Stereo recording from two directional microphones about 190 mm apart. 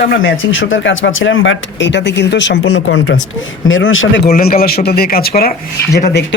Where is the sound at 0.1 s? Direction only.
85° left.